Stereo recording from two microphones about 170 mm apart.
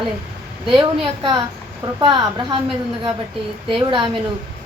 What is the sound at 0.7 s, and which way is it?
Speech, 30° right (ahead or behind).